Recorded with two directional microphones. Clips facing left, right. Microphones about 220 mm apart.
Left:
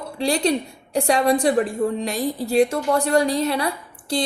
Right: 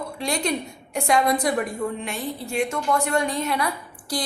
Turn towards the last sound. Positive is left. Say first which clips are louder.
# left 4 dB
turn(degrees=30)  # may be behind; listen again after turning